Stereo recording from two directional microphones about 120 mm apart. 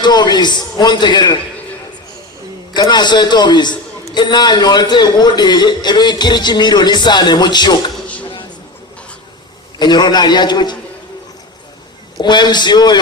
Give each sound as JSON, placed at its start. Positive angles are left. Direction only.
{"t": 0.0, "sound": "a man's voice", "side_deg": 35}
{"t": 2.7, "sound": "a man's voice", "side_deg": 35}
{"t": 8.0, "sound": "a sound", "side_deg": 10}
{"t": 9.7, "sound": "a man's voice", "side_deg": 35}
{"t": 12.2, "sound": "a man's voice", "side_deg": 40}